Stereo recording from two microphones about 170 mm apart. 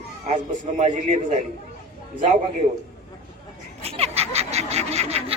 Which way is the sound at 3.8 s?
35° right (ahead or behind).